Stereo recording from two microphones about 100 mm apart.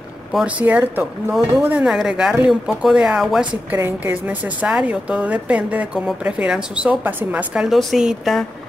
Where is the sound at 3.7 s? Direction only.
20° right (ahead or behind); by 8.4 s 5° right (ahead or behind).